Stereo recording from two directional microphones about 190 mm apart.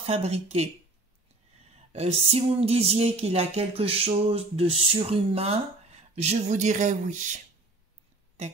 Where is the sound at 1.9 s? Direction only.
35° right (ahead or behind).